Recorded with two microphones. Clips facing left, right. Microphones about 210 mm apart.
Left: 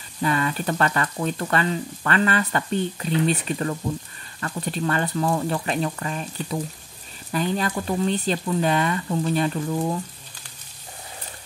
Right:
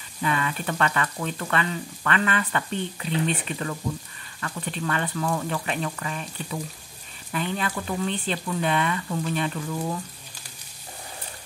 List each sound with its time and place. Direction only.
0.2 s speech: 40° left (ahead or behind)